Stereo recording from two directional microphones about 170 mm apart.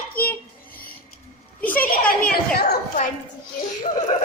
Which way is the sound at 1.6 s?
10° left (ahead or behind).